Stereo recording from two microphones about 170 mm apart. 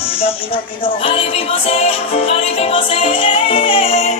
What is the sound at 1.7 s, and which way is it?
Music, 35° left (ahead or behind).